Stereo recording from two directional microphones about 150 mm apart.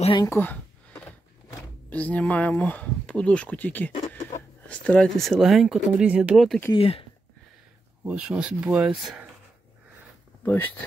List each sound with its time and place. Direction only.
0.2 s speech: 15° left (ahead or behind)
1.9 s speech: 10° left (ahead or behind)
6.7 s speech: 35° left (ahead or behind)
8.0 s speech: 10° right (ahead or behind)
10.4 s speech: 15° left (ahead or behind)